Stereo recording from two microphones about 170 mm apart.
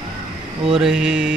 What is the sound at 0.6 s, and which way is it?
Speech, 5° right (ahead or behind).